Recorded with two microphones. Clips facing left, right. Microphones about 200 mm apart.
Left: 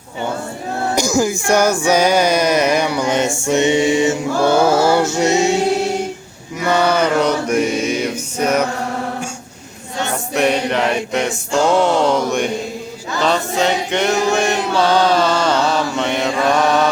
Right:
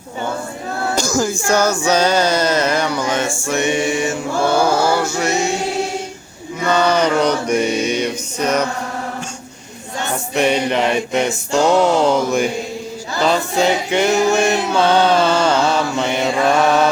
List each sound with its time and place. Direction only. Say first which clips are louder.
0.9 s music: left 3 dB; 15° left (ahead or behind)
3.4 s mantra: left 5 dB; 20° left (ahead or behind)
6.7 s music: even; 10° left (ahead or behind)
10.3 s music: even; centre (ahead or behind)
15.2 s mantra: right 1 dB; 5° right (ahead or behind)